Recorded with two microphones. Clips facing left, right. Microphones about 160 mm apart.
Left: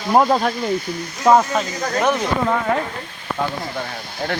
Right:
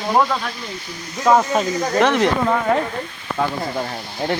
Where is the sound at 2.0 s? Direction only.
90° right.